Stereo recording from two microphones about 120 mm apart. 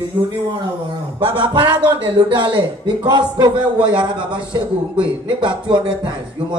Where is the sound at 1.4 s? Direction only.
40° right (ahead or behind).